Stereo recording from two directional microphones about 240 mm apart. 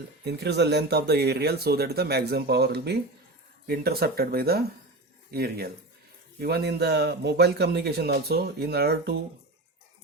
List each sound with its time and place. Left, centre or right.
0.3 s a man's voice: right